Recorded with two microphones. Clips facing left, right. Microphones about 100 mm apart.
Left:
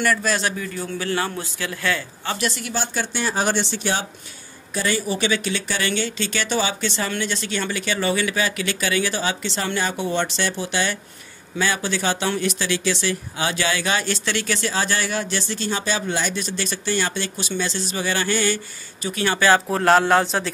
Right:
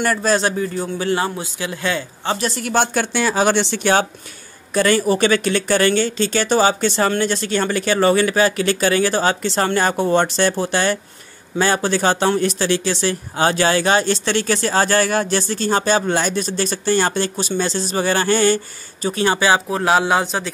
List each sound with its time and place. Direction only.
0.0 s a man's voice: 35° right (ahead or behind)
2.4 s speech: 40° right (ahead or behind)
2.7 s a man's voice: 60° right (ahead or behind); by 19.4 s 30° right (ahead or behind)
19.7 s a man's voice: 5° right (ahead or behind)